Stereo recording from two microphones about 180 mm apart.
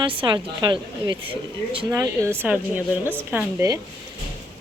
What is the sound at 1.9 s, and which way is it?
Speech, 15° right (ahead or behind).